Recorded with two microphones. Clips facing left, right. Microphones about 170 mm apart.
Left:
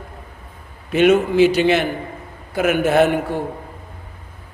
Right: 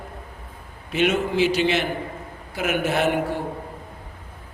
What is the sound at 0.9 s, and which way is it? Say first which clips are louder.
A man's voice: left 7 dB; 50° left (ahead or behind).